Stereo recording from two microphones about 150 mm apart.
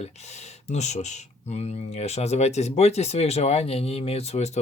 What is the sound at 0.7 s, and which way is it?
Speech, 50° left (ahead or behind).